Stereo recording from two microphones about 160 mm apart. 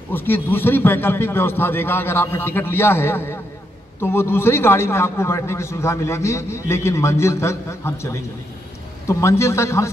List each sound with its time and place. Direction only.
0.1 s a man's voice: 15° left (ahead or behind)